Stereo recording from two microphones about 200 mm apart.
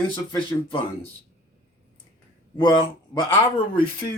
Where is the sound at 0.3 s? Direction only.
25° left (ahead or behind).